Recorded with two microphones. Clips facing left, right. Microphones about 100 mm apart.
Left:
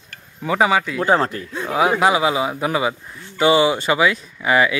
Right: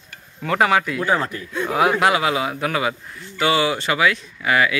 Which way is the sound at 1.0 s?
30° left (ahead or behind).